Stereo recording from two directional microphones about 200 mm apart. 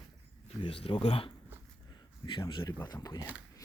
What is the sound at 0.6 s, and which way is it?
Speech, 25° left (ahead or behind).